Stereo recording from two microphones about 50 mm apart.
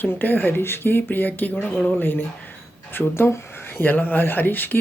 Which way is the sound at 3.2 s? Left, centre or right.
Left.